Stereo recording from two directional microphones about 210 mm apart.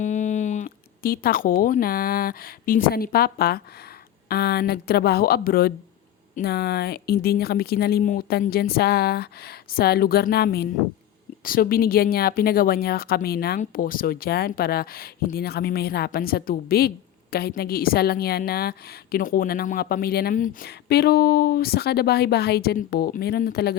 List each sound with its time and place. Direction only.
0.0 s a woman's voice: 35° left (ahead or behind)